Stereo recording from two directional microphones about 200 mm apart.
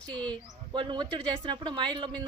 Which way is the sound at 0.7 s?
25° right (ahead or behind).